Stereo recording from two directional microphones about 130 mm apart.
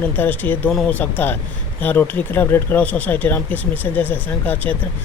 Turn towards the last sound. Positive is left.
turn(degrees=15)  # may be behind; listen again after turning